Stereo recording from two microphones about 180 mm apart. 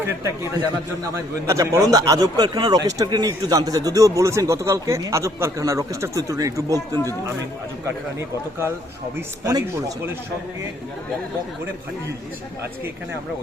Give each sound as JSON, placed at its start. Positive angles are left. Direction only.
{"t": 0.0, "sound": "speech", "side_deg": -15}
{"t": 9.4, "sound": "speech", "side_deg": -20}